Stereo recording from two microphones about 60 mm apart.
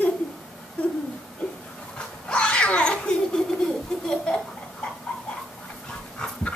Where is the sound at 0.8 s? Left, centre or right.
Centre.